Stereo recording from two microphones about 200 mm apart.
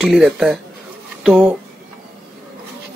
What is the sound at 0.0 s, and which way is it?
Speech, centre (ahead or behind).